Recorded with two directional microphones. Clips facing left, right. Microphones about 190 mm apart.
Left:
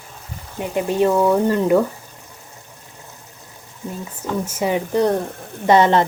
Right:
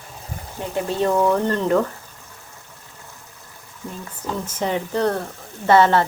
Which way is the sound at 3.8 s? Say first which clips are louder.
Left 3 dB; 20° left (ahead or behind).